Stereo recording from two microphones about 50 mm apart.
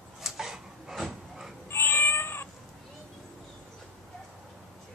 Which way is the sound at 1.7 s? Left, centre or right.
Left.